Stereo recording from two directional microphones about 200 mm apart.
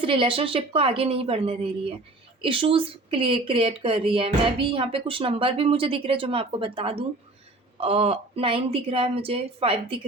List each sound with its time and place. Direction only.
0.0 s speech: 25° right (ahead or behind)